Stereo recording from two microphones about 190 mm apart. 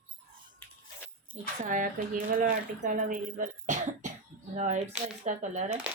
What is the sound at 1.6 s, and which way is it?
Speech, 45° right (ahead or behind).